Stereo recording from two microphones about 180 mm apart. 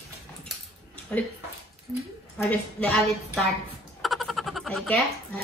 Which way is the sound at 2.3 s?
5° left (ahead or behind).